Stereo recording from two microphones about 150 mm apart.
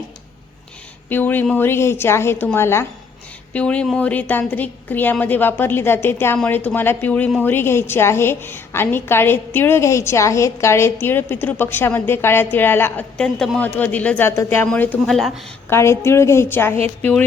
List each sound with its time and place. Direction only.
1.1 s a woman's voice: 10° left (ahead or behind)
15.7 s a woman's voice: 15° left (ahead or behind)